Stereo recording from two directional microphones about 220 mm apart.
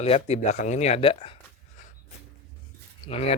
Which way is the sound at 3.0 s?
25° left (ahead or behind).